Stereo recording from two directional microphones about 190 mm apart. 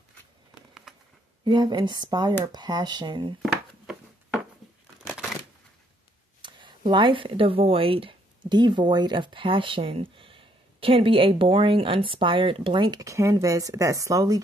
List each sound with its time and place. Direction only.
0.9 s a sound: centre (ahead or behind)
1.4 s speech: 20° right (ahead or behind)
4.6 s crumpling: centre (ahead or behind)
6.9 s speech: 25° right (ahead or behind)